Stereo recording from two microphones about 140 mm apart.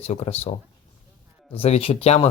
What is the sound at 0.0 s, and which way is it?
Speech, 45° left (ahead or behind).